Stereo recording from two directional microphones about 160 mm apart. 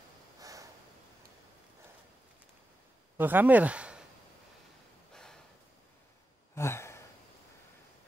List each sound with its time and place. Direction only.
0.4 s snort: 20° right (ahead or behind)
3.2 s speech: 10° right (ahead or behind)
5.1 s a sound: 5° left (ahead or behind)
6.5 s sigh: 15° left (ahead or behind)